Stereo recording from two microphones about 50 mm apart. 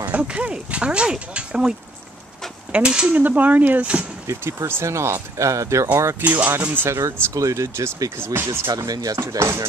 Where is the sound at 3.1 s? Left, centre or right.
Right.